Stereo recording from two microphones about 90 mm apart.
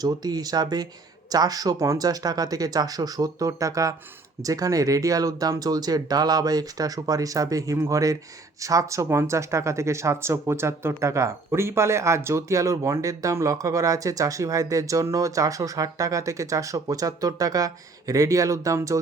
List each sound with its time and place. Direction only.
0.0 s speech: 45° right (ahead or behind)